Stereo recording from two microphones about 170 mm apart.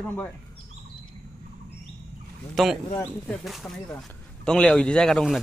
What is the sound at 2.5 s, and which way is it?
Speech, centre (ahead or behind).